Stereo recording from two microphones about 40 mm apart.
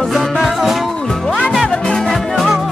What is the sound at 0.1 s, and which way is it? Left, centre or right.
Music, centre.